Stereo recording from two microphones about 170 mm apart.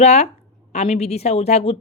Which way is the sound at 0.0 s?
40° left (ahead or behind).